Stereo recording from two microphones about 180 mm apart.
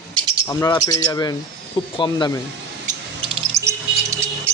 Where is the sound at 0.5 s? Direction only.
20° left (ahead or behind).